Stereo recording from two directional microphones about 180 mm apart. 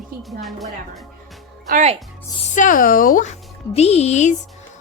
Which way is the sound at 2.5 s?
45° left (ahead or behind).